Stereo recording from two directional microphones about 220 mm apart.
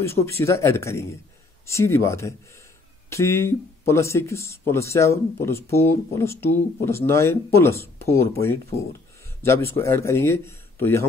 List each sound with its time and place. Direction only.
0.0 s speech: 10° left (ahead or behind)